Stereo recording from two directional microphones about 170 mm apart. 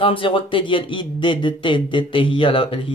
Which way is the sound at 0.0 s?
30° left (ahead or behind).